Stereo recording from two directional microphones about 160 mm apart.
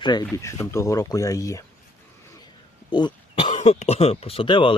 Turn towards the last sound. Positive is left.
turn(degrees=30)  # may be behind; listen again after turning